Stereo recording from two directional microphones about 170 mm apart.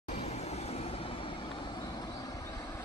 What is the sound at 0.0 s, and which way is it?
Vehicle, 40° left (ahead or behind).